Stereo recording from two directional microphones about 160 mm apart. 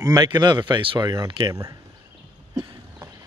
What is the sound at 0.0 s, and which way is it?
Speech, 25° right (ahead or behind).